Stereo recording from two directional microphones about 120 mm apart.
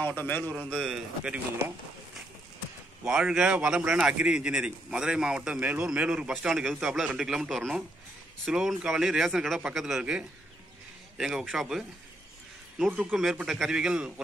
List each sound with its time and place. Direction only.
0.0 s a man's voice: 15° left (ahead or behind)
0.7 s a man's voice: centre (ahead or behind)
3.1 s a man's voice: 5° right (ahead or behind)